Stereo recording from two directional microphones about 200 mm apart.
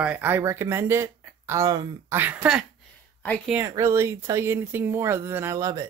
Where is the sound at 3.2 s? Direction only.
5° left (ahead or behind).